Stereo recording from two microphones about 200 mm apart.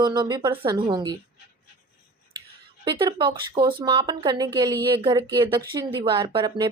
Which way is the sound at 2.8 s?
20° right (ahead or behind).